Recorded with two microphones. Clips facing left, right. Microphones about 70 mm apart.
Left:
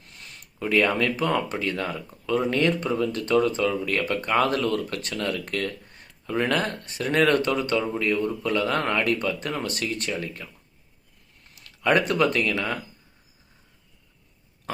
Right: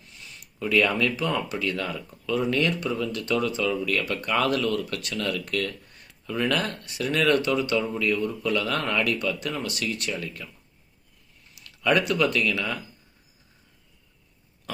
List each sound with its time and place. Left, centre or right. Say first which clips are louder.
0.0 s a sound: left 1 dB; left
0.6 s speech: left 1 dB; left
11.5 s speech: left 1 dB; left